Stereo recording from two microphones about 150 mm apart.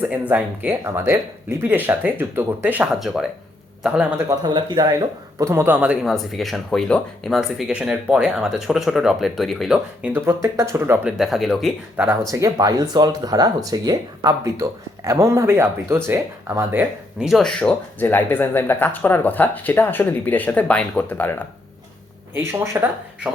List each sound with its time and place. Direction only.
0.0 s speech: 10° right (ahead or behind)
4.2 s speech: 20° right (ahead or behind)
10.2 s speech: 15° right (ahead or behind)
11.2 s speech: centre (ahead or behind)
12.3 s speech: 25° right (ahead or behind)
17.2 s speech: centre (ahead or behind)
22.4 s speech: 15° right (ahead or behind)